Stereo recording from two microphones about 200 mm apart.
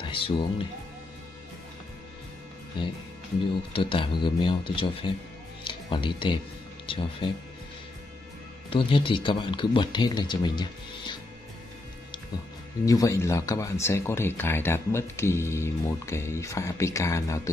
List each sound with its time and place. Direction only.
0.0 s speech: 25° left (ahead or behind)
3.7 s speech: 25° left (ahead or behind)
8.6 s speech: 25° left (ahead or behind)
12.8 s speech: 15° left (ahead or behind)